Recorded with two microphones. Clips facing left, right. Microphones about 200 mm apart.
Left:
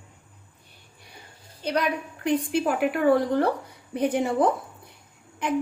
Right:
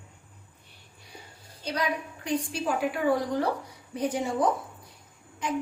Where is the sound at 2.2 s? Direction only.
60° left (ahead or behind).